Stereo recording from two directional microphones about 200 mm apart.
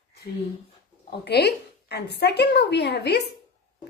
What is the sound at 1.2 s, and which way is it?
A woman's voice, 55° left (ahead or behind).